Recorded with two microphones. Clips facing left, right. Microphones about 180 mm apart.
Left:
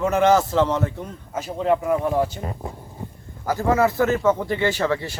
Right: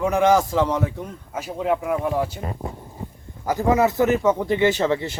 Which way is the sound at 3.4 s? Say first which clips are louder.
Right 1 dB; 15° right (ahead or behind).